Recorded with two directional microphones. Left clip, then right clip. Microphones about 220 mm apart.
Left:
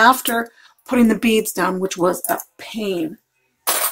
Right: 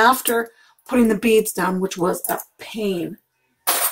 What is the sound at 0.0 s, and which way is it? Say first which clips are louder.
Speech: left 2 dB; 35° left (ahead or behind).